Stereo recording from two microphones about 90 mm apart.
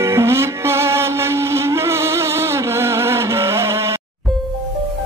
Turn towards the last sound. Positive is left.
turn(degrees=-30)  # may be behind; listen again after turning